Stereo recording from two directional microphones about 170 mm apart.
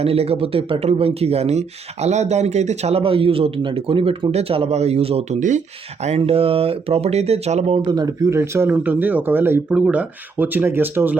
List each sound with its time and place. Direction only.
0.0 s speech: 35° right (ahead or behind)
7.9 s speech: 20° right (ahead or behind)